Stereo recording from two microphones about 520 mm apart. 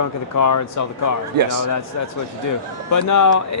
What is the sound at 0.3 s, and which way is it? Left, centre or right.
Speech, left.